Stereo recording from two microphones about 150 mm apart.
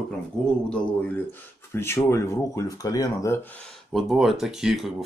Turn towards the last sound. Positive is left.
turn(degrees=0)  # may be behind; listen again after turning